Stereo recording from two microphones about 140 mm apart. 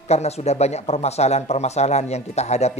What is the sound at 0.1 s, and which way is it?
Speech, 50° left (ahead or behind).